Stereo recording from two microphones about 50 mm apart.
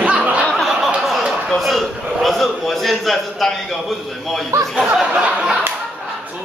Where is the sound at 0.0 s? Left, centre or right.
Right.